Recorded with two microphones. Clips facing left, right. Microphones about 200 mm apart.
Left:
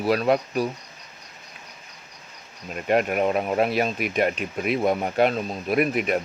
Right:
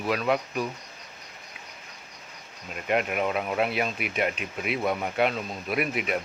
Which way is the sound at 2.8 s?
40° left (ahead or behind).